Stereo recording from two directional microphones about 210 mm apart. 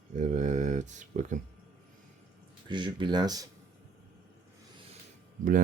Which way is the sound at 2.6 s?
20° right (ahead or behind).